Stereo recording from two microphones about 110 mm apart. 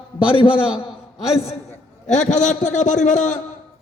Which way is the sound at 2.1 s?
90° left.